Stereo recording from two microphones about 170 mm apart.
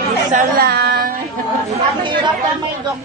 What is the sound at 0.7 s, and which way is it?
Child singing, 70° right (ahead or behind).